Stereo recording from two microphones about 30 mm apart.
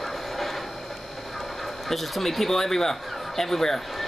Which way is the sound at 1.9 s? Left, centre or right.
Centre.